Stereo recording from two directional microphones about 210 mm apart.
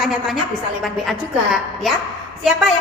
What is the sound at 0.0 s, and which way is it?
A woman's voice, centre (ahead or behind).